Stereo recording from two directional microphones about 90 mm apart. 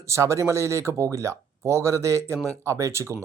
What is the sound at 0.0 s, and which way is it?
Speech, 35° right (ahead or behind).